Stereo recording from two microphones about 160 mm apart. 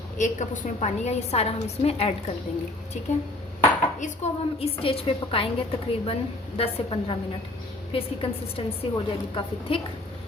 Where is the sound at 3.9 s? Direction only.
45° left (ahead or behind).